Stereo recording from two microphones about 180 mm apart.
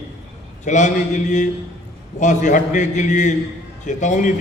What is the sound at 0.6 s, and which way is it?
A man's voice, 40° left (ahead or behind).